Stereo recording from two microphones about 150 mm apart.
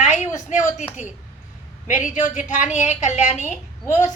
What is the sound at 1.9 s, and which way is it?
A woman's voice, 60° left (ahead or behind).